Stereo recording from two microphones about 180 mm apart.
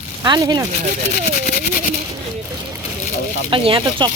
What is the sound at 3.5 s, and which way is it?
Speech, 25° right (ahead or behind).